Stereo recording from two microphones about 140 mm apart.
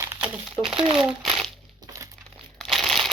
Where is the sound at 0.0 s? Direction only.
15° right (ahead or behind).